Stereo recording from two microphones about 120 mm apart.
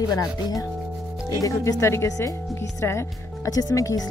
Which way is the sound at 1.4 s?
25° left (ahead or behind).